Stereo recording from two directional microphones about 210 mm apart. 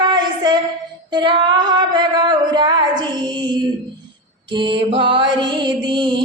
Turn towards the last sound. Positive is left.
turn(degrees=-20)  # may be behind; listen again after turning